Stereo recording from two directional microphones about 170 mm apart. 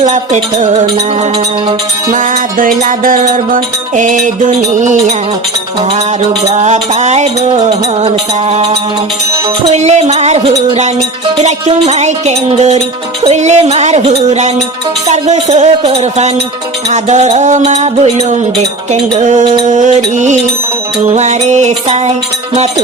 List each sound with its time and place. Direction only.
0.0 s music: 45° right (ahead or behind)
2.0 s music: 55° right (ahead or behind)
6.5 s music: 45° right (ahead or behind)